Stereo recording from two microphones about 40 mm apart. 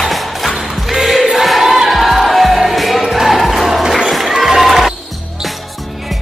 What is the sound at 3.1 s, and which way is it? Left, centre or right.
Music, centre.